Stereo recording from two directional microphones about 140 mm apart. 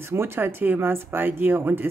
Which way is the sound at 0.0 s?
15° right (ahead or behind).